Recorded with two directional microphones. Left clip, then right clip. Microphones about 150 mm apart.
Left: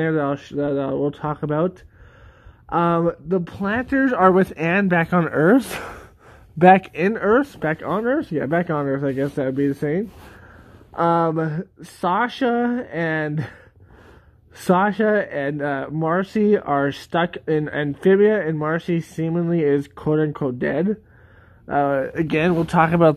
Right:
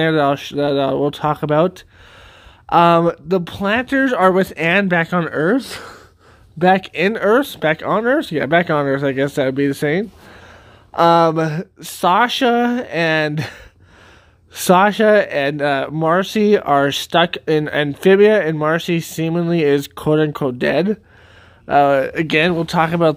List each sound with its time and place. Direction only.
0.0 s speech: 30° right (ahead or behind)
2.7 s speech: 30° right (ahead or behind); by 5.5 s 5° left (ahead or behind)
5.5 s speech: 20° left (ahead or behind)
6.6 s speech: centre (ahead or behind)
6.9 s speech: 10° right (ahead or behind)
22.4 s speech: 5° right (ahead or behind)